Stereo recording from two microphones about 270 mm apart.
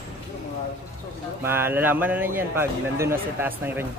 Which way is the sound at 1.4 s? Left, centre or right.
Centre.